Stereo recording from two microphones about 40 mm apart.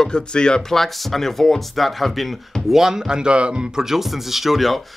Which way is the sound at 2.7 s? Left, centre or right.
Centre.